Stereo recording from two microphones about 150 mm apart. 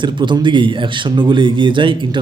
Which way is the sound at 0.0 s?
30° right (ahead or behind).